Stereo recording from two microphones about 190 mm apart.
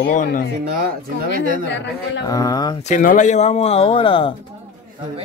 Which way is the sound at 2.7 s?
40° left (ahead or behind).